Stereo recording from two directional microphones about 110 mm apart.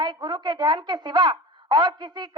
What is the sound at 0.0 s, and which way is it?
Speech, 40° right (ahead or behind).